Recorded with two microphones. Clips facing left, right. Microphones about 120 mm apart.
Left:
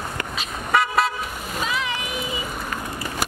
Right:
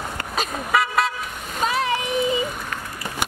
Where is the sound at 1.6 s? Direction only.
40° right (ahead or behind).